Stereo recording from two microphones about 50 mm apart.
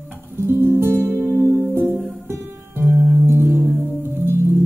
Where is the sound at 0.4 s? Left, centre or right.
Right.